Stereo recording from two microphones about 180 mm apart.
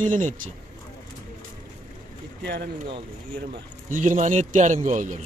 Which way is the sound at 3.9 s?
45° right (ahead or behind).